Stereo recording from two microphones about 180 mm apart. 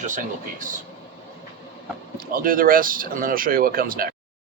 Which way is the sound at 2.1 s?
50° right (ahead or behind).